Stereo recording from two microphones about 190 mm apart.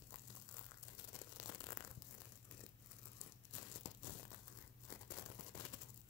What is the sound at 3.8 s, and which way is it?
Crumpling, 25° left (ahead or behind).